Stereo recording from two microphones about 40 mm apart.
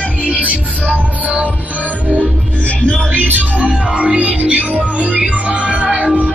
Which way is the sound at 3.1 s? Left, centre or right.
Right.